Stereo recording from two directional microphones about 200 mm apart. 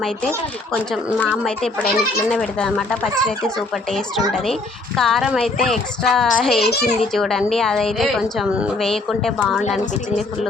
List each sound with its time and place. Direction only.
1.3 s a woman's voice: 5° left (ahead or behind)
4.9 s a woman's voice: centre (ahead or behind)
6.7 s a child's voice: 55° left (ahead or behind)
7.0 s a woman's voice: centre (ahead or behind)